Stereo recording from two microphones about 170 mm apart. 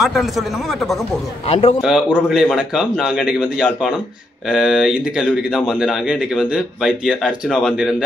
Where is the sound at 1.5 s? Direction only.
35° left (ahead or behind).